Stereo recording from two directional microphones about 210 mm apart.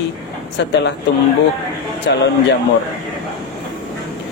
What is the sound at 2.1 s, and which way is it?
Speech, 55° left (ahead or behind).